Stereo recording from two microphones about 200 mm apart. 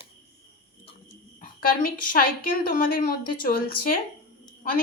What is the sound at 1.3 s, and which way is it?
A woman's voice, 45° left (ahead or behind).